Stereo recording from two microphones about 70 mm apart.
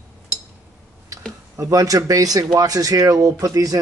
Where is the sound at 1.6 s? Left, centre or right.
Right.